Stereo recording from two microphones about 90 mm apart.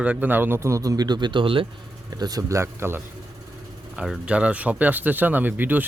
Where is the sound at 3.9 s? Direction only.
5° right (ahead or behind).